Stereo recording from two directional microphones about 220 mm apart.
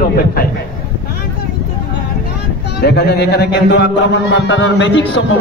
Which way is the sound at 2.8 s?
50° left (ahead or behind).